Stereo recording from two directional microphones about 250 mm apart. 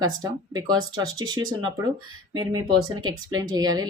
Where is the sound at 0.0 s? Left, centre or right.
Centre.